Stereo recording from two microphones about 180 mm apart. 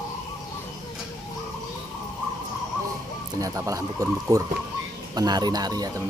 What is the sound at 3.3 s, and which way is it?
Speech, 20° right (ahead or behind).